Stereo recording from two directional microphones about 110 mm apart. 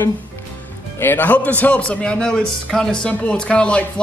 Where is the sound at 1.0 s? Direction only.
20° left (ahead or behind).